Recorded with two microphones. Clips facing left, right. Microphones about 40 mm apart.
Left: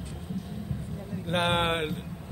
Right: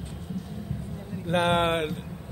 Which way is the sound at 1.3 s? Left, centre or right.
Left.